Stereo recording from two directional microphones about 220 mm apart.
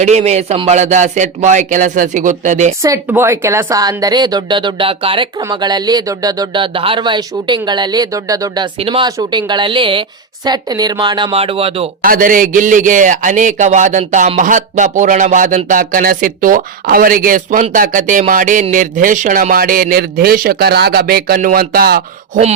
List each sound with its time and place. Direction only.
0.0 s a man's voice: 30° right (ahead or behind)
2.8 s speech: 10° right (ahead or behind)
12.0 s a man's voice: 40° right (ahead or behind)